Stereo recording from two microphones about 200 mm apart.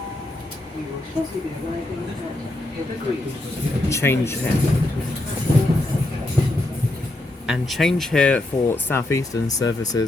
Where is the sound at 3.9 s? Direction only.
15° left (ahead or behind).